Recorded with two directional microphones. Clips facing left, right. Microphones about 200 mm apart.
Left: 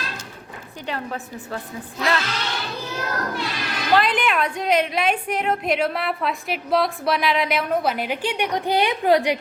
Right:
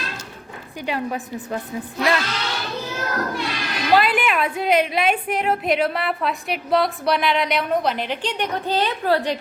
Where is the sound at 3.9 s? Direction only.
5° right (ahead or behind).